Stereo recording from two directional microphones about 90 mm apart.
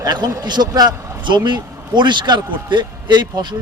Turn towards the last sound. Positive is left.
turn(degrees=-55)  # may be behind; listen again after turning